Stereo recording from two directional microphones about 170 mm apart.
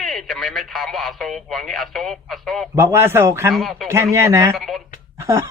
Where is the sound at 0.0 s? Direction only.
Centre (ahead or behind).